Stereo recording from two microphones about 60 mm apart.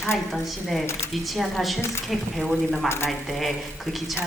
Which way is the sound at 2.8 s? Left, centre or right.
Left.